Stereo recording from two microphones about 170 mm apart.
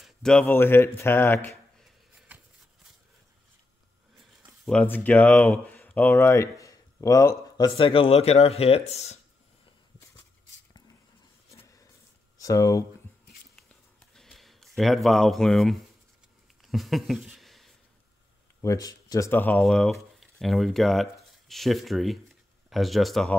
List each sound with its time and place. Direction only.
0.0 s speech: 5° left (ahead or behind)
2.3 s shuffle: 10° right (ahead or behind)
4.6 s speech: 10° left (ahead or behind); by 9.2 s 40° left (ahead or behind)
11.6 s a sound: 20° left (ahead or behind)
12.4 s speech: 20° left (ahead or behind)
13.7 s a sound: centre (ahead or behind)
18.6 s speech: 20° left (ahead or behind); by 23.3 s centre (ahead or behind)